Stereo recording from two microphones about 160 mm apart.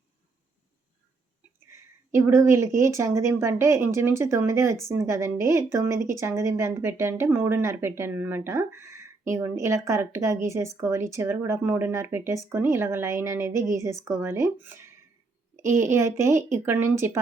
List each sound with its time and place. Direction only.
1.6 s speech: 15° right (ahead or behind)